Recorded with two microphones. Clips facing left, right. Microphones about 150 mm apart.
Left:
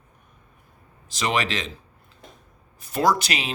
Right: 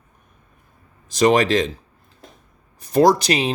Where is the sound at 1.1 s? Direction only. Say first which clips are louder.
Right 10 dB; 45° right (ahead or behind).